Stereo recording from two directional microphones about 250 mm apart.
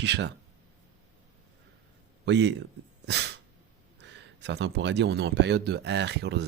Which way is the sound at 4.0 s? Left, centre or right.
Right.